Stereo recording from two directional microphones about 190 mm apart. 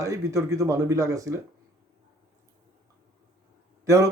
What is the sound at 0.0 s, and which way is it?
Speech, 15° right (ahead or behind).